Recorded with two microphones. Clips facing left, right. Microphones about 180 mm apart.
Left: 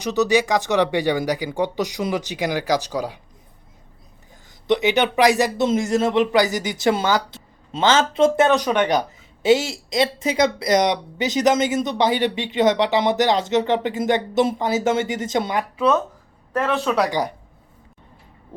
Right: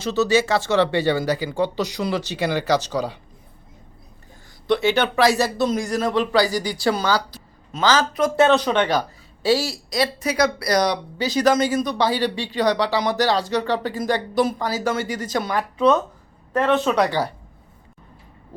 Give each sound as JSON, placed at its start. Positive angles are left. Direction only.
{"t": 0.0, "sound": "speech", "side_deg": 15}
{"t": 4.6, "sound": "speech", "side_deg": 20}
{"t": 8.4, "sound": "speech", "side_deg": 15}
{"t": 16.6, "sound": "speech", "side_deg": 5}
{"t": 17.1, "sound": "speech", "side_deg": 15}